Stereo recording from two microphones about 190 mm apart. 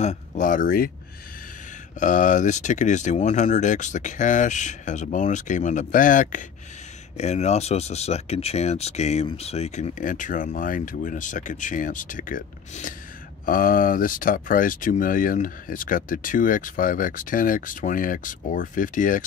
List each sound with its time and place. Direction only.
0.0 s speech: 35° left (ahead or behind)
2.0 s speech: 40° left (ahead or behind)